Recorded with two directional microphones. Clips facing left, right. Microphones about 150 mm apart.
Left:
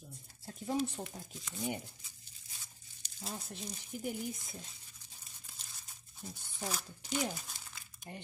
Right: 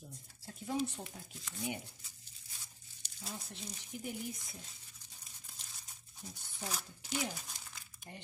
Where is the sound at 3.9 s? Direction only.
45° left (ahead or behind).